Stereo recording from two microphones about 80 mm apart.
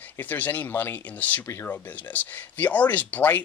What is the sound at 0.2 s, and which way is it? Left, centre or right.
Speech, left.